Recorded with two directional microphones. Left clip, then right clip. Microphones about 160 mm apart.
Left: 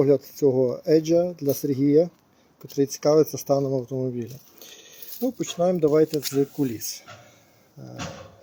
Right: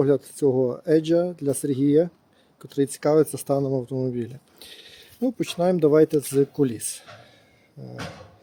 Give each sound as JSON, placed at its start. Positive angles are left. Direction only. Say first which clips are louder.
{"t": 0.0, "sound": "speech", "louder": "left 1 dB", "side_deg": -10}